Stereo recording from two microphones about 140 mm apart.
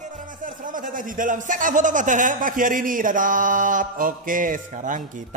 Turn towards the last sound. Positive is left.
turn(degrees=-65)  # may be behind; listen again after turning